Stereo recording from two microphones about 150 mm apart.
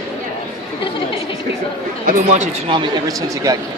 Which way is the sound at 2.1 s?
50° right (ahead or behind).